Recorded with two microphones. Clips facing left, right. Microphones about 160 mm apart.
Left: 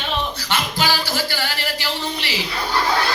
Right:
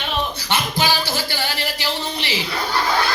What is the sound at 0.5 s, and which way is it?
Music, 15° right (ahead or behind).